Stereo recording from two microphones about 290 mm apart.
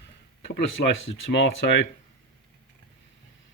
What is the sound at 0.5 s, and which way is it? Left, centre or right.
Speech, left.